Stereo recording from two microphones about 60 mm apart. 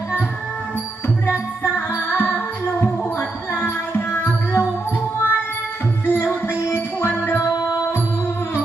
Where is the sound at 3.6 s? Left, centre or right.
Left.